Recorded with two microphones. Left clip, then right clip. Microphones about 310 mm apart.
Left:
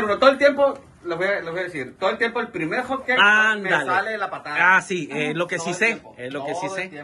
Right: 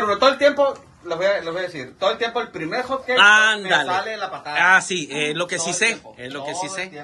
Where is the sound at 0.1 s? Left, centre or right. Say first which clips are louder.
Left 1 dB; centre.